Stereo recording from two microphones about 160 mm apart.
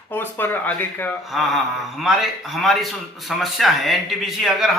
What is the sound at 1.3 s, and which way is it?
Speech, centre (ahead or behind).